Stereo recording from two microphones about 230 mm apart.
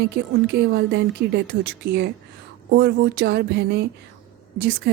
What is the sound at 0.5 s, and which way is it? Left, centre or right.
A woman's voice, right.